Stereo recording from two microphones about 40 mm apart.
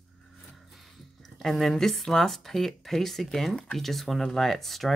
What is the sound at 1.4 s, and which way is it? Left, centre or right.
Speech, centre.